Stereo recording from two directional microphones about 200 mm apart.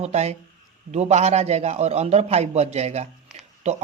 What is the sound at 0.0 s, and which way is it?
Speech, 35° right (ahead or behind).